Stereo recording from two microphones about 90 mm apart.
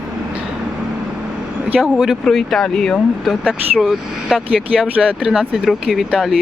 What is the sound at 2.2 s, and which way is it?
Speech, 5° left (ahead or behind).